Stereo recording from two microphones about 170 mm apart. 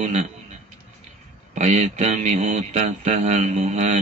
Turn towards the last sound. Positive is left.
turn(degrees=-45)  # may be behind; listen again after turning